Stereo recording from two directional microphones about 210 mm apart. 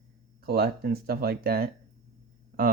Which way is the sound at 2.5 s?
45° right (ahead or behind).